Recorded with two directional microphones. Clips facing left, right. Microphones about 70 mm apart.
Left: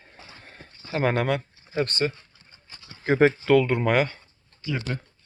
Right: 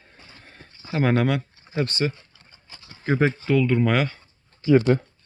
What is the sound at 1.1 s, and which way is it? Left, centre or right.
Speech, centre.